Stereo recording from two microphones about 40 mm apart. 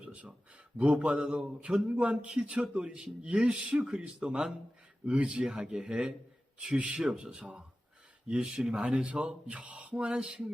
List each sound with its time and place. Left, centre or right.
0.0 s a sound: right
0.8 s mantra: right
1.2 s a man's voice: right
5.5 s a man's voice: centre